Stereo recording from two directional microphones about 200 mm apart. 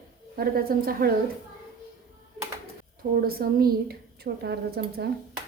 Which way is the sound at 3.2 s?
50° right (ahead or behind).